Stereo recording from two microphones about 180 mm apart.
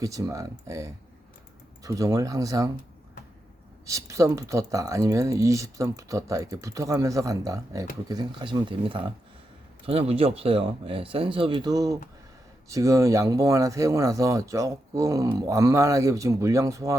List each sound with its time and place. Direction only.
0.0 s speech: 20° right (ahead or behind)
3.8 s speech: 15° right (ahead or behind)